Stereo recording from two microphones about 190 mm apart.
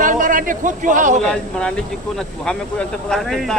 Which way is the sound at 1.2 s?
5° left (ahead or behind).